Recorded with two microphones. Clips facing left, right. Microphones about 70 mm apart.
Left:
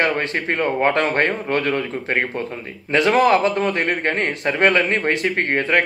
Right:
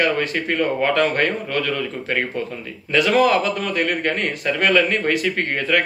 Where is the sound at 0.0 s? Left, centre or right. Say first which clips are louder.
Even; left.